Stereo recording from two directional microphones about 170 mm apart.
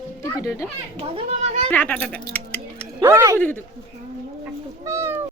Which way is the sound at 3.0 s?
15° right (ahead or behind).